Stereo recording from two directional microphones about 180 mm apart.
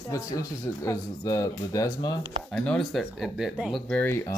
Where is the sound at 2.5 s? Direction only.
5° left (ahead or behind).